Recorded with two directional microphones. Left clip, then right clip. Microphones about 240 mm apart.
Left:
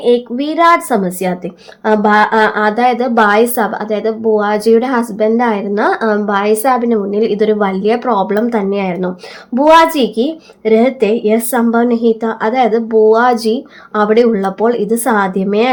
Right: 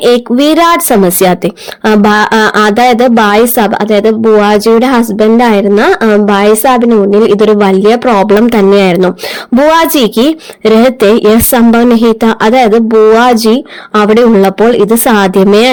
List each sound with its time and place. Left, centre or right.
0.3 s a woman's voice: right